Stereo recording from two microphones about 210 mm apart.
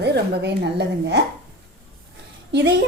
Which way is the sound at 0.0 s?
55° right (ahead or behind).